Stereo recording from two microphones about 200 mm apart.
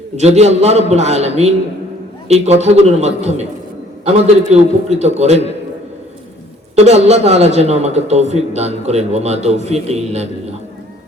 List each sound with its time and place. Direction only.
0.2 s a man's voice: 35° right (ahead or behind)
6.7 s a man's voice: 35° right (ahead or behind)